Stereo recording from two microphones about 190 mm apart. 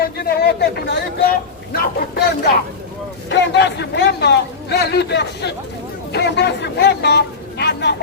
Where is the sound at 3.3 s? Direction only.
65° left (ahead or behind).